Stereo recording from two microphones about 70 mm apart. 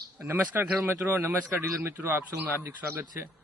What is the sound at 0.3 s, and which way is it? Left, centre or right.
Speech, right.